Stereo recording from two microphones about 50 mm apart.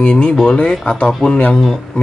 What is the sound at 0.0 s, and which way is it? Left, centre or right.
Speech, left.